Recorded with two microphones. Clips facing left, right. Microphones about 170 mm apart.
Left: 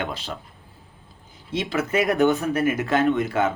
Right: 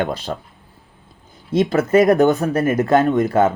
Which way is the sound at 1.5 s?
45° right (ahead or behind).